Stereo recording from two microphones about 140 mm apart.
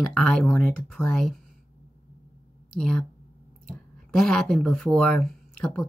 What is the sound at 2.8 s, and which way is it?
Speech, 5° left (ahead or behind).